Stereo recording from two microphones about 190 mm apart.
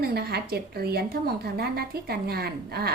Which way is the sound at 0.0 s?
55° right (ahead or behind).